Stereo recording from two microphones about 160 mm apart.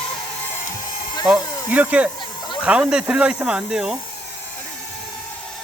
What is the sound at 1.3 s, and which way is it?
Speech, 10° right (ahead or behind).